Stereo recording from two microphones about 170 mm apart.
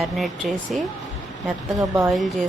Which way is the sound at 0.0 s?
Centre (ahead or behind).